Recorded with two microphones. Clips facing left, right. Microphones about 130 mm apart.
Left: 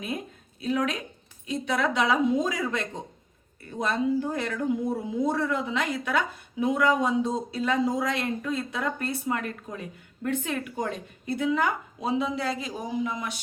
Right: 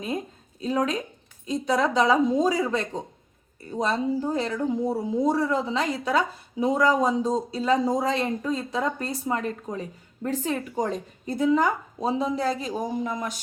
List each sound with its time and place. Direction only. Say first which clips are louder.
0.6 s a woman's voice: right 2 dB; 35° right (ahead or behind)